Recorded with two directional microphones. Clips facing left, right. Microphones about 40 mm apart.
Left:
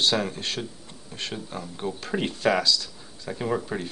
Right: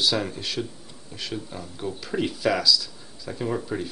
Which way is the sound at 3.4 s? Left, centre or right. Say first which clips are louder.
Even; centre.